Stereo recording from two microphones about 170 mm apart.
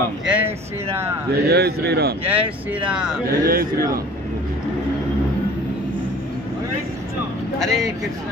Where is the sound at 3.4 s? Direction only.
60° right (ahead or behind).